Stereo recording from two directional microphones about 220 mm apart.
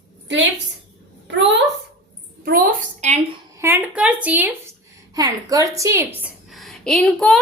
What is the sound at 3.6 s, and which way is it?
A woman's voice, 10° right (ahead or behind).